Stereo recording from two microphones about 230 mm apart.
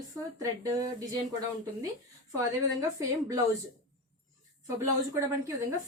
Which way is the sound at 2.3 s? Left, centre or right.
Centre.